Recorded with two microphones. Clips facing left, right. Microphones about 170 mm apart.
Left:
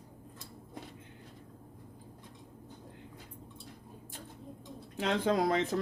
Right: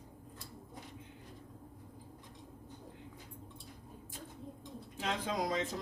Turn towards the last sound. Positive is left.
turn(degrees=60)  # may be behind; listen again after turning